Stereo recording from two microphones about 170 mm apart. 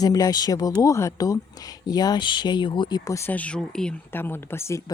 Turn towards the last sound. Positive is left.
turn(degrees=15)  # may be behind; listen again after turning